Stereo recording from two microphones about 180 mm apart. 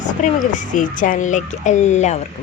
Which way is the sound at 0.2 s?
45° left (ahead or behind).